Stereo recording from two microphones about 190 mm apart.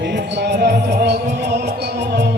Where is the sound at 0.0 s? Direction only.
65° right (ahead or behind).